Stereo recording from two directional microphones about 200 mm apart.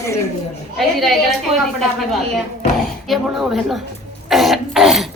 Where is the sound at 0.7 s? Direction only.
Centre (ahead or behind).